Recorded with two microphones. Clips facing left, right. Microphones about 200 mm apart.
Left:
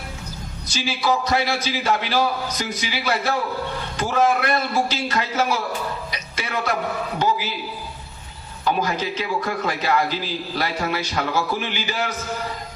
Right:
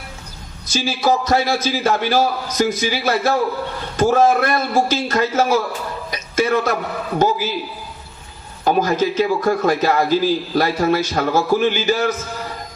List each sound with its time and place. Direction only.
0.7 s a man's voice: 45° right (ahead or behind)
6.1 s a sound: 45° right (ahead or behind)
8.6 s a man's voice: 45° right (ahead or behind)